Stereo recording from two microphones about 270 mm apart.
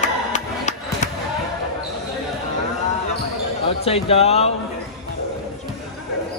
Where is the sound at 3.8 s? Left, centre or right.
Left.